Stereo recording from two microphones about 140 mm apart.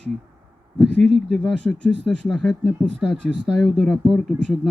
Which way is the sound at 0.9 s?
5° left (ahead or behind).